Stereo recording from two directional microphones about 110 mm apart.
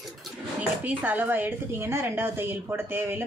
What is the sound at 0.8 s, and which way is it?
A woman's voice, 15° right (ahead or behind).